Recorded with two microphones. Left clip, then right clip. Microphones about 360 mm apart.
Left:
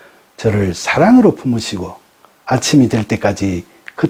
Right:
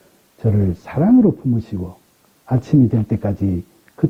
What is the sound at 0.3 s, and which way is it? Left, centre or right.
Speech, centre.